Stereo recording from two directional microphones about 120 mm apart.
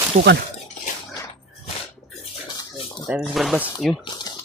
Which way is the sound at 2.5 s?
40° left (ahead or behind).